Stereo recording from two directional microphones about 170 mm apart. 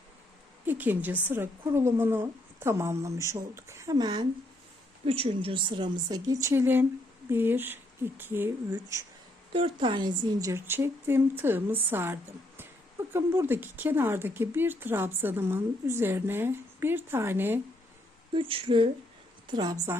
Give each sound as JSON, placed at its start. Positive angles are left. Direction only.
{"t": 0.6, "sound": "a woman's voice", "side_deg": -10}
{"t": 9.5, "sound": "a woman's voice", "side_deg": -30}
{"t": 18.3, "sound": "a woman's voice", "side_deg": -30}